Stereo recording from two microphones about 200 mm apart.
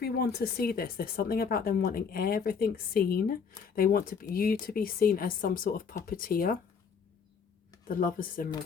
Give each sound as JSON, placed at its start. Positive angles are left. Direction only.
{"t": 0.0, "sound": "speech", "side_deg": 55}
{"t": 7.9, "sound": "speech", "side_deg": 45}